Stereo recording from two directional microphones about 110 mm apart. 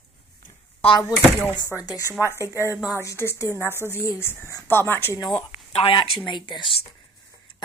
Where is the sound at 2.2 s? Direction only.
25° right (ahead or behind).